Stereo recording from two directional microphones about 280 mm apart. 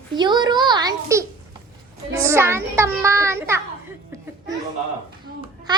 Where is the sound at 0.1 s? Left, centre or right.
Centre.